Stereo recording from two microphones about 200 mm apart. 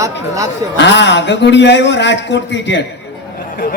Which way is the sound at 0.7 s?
65° left (ahead or behind).